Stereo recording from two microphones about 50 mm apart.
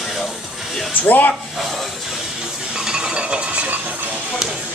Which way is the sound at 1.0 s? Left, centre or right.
Left.